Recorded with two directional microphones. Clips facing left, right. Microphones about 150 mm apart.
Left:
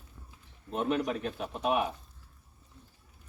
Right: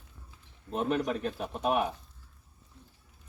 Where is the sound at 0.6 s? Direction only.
Centre (ahead or behind).